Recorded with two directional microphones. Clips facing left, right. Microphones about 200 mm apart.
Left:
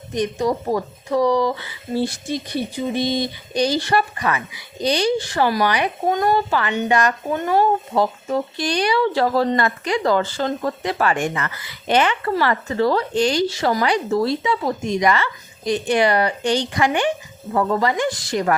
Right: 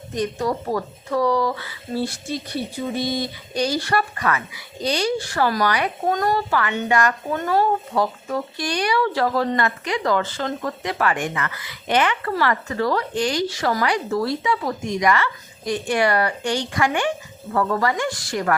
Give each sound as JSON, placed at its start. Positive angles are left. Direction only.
{"t": 0.1, "sound": "speech", "side_deg": 15}
{"t": 6.5, "sound": "speech", "side_deg": 25}